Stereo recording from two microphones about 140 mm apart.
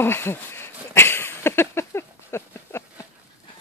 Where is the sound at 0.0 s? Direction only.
15° left (ahead or behind).